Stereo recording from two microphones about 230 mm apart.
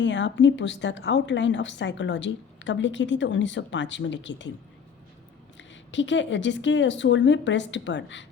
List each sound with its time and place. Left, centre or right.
0.0 s a woman's voice: left
5.5 s a woman's voice: left